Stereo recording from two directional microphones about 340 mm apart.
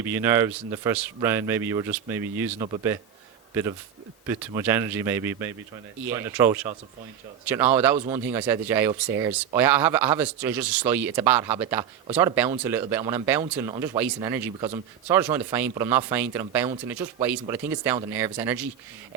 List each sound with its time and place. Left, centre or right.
0.0 s speech: centre